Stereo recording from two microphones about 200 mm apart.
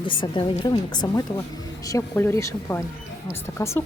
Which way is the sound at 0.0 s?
25° left (ahead or behind).